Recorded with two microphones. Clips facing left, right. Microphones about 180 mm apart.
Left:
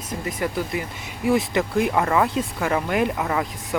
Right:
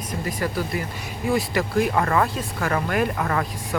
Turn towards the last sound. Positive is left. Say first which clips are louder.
# left 1 dB
turn(degrees=15)  # may be behind; listen again after turning